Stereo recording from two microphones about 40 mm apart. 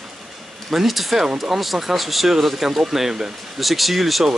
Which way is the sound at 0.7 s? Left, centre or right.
Centre.